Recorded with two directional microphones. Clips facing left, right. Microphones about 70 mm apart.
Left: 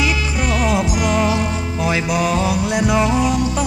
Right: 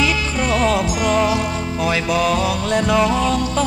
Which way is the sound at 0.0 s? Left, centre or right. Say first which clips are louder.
Right 1 dB; centre.